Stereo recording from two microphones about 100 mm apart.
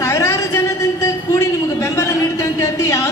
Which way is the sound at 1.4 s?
35° left (ahead or behind).